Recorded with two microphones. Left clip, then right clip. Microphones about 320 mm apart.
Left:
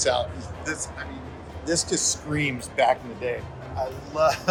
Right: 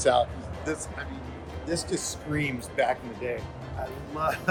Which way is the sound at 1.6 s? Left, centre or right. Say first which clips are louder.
Left 6 dB; left.